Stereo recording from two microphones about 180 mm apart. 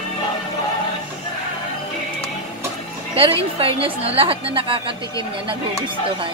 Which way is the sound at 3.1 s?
30° right (ahead or behind).